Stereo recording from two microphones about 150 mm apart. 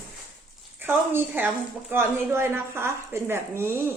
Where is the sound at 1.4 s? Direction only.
15° right (ahead or behind).